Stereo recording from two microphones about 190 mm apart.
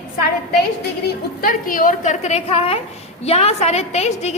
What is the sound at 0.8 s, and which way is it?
A woman's voice, 55° left (ahead or behind).